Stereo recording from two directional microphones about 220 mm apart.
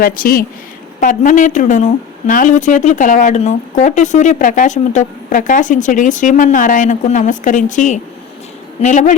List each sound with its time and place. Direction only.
0.0 s a woman's voice: 40° left (ahead or behind)